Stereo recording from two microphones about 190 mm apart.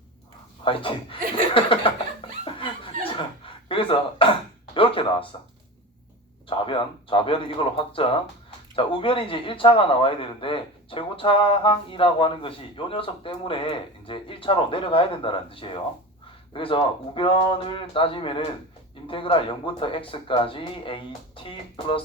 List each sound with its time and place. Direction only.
0.6 s speech: 25° left (ahead or behind)
1.5 s laughter: 30° left (ahead or behind)
3.0 s chuckle: 30° left (ahead or behind)
4.7 s speech: 30° left (ahead or behind)
6.5 s speech: 25° left (ahead or behind)